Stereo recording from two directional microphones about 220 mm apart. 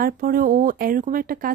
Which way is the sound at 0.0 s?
40° right (ahead or behind).